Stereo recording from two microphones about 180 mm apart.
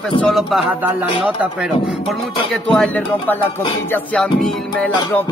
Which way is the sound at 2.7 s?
5° left (ahead or behind).